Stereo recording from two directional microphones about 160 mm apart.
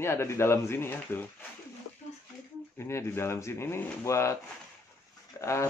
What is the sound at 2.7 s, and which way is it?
Speech, 15° left (ahead or behind).